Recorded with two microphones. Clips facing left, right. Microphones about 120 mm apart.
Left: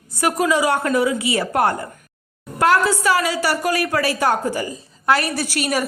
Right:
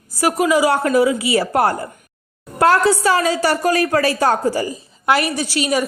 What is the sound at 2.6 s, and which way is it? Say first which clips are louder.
A woman's voice: right 3 dB; 40° right (ahead or behind).